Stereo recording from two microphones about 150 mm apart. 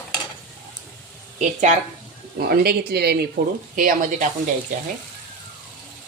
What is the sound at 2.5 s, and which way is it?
Speech, 90° right.